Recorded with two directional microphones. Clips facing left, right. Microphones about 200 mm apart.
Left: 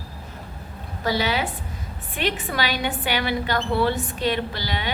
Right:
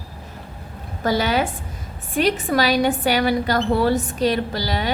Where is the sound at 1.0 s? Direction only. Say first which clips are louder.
Right 4 dB; 45° right (ahead or behind).